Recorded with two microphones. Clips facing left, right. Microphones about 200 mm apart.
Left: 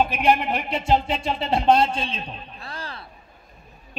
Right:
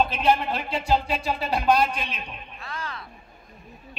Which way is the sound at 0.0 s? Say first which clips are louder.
Left 2 dB; 15° left (ahead or behind).